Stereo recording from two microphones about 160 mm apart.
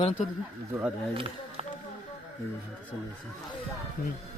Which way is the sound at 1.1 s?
35° right (ahead or behind).